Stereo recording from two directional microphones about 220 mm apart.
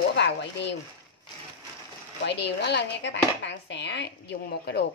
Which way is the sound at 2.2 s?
50° left (ahead or behind).